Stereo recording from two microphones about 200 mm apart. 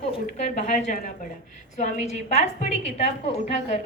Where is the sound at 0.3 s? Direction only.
35° left (ahead or behind).